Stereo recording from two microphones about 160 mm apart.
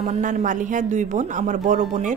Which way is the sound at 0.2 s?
50° right (ahead or behind).